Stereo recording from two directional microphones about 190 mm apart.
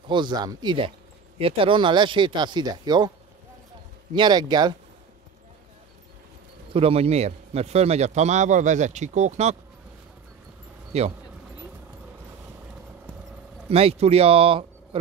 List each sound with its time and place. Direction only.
0.1 s speech: 25° right (ahead or behind)
4.1 s speech: 25° right (ahead or behind)
6.7 s a man's voice: 30° right (ahead or behind)
10.9 s speech: 35° right (ahead or behind)
13.7 s speech: 30° right (ahead or behind)